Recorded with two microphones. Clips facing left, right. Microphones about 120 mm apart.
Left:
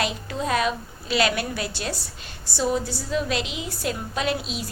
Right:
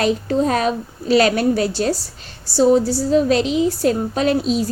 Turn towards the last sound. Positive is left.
turn(degrees=-40)  # may be behind; listen again after turning